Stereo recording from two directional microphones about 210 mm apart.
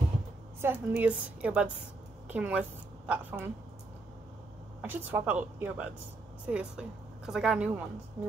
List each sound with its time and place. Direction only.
0.6 s a woman's voice: 10° right (ahead or behind)
4.8 s a woman's voice: 10° right (ahead or behind)